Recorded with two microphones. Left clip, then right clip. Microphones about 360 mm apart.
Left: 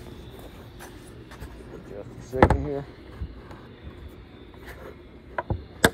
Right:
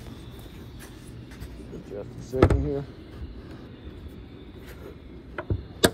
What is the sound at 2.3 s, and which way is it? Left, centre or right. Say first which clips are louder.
Speech: left 2 dB; centre.